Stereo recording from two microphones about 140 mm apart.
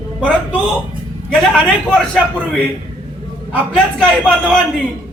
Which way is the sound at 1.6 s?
10° right (ahead or behind).